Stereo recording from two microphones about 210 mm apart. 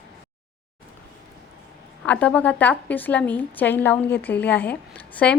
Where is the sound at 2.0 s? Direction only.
5° left (ahead or behind).